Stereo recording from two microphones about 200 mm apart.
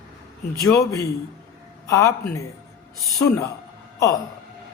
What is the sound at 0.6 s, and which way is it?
A woman's voice, 15° left (ahead or behind).